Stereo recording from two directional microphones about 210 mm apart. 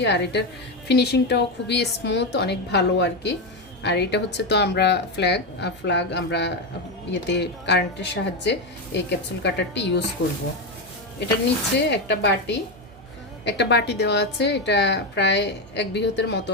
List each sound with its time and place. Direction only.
0.0 s a woman's voice: 55° left (ahead or behind)
11.8 s a woman's voice: 55° left (ahead or behind)